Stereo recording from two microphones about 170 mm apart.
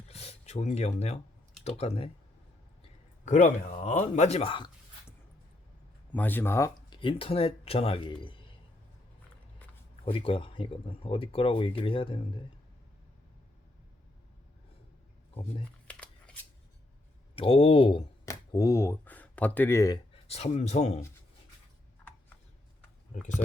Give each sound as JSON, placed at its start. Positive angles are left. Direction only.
{"t": 0.1, "sound": "a sound", "side_deg": 35}
{"t": 1.6, "sound": "speech", "side_deg": 40}
{"t": 3.2, "sound": "speech", "side_deg": 45}
{"t": 6.1, "sound": "speech", "side_deg": 10}
{"t": 6.9, "sound": "speech", "side_deg": 30}
{"t": 10.0, "sound": "speech", "side_deg": 30}
{"t": 15.9, "sound": "shuffling cards", "side_deg": 5}
{"t": 17.3, "sound": "speech", "side_deg": 30}
{"t": 18.3, "sound": "speech", "side_deg": 20}
{"t": 20.2, "sound": "speech", "side_deg": 40}